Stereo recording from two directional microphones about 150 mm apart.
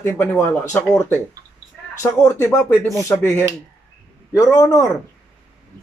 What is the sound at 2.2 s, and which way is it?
Speech, 20° left (ahead or behind).